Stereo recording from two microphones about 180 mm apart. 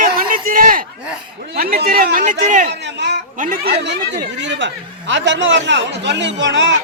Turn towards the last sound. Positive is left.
turn(degrees=-85)